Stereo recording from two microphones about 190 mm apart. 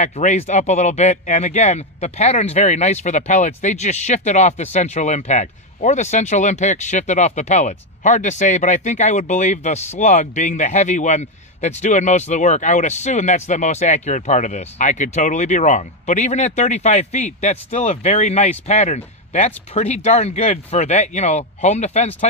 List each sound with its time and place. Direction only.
0.0 s speech: 40° left (ahead or behind)